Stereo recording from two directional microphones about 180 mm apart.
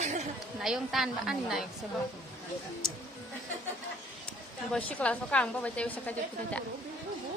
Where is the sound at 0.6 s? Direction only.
Centre (ahead or behind).